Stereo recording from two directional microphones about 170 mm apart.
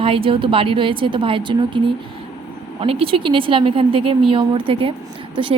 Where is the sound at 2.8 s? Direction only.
35° right (ahead or behind).